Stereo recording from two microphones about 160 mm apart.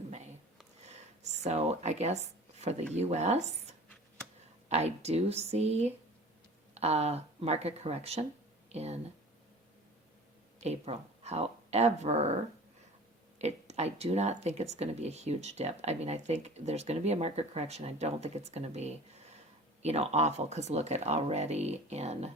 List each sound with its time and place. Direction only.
0.9 s a sound: 45° right (ahead or behind)
2.9 s speech: 45° right (ahead or behind)
10.6 s speech: 45° right (ahead or behind)
13.4 s speech: 45° right (ahead or behind)